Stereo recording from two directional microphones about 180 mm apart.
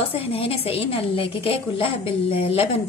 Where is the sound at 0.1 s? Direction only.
35° left (ahead or behind).